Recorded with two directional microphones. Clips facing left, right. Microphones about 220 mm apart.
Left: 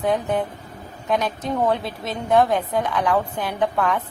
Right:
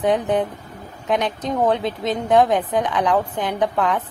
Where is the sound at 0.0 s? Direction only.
20° right (ahead or behind).